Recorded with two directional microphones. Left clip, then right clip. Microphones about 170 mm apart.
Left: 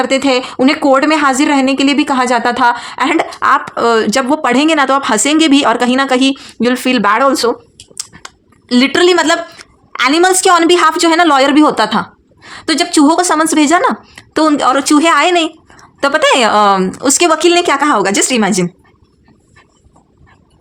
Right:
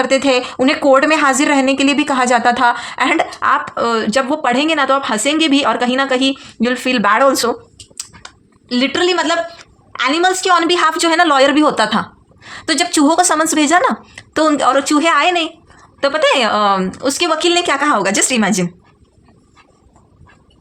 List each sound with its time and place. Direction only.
0.0 s a woman's voice: 25° left (ahead or behind)
8.7 s a woman's voice: 35° left (ahead or behind)